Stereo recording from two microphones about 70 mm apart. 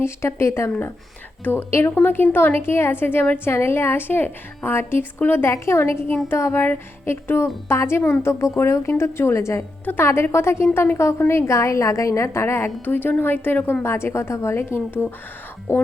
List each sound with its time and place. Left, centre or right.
0.0 s a woman's voice: left
9.8 s a woman's voice: left
10.3 s a woman's voice: left